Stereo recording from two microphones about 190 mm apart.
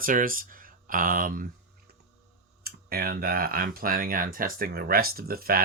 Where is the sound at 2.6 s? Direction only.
55° right (ahead or behind).